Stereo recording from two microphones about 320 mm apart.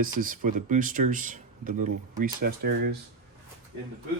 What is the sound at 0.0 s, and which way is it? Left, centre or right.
Speech, right.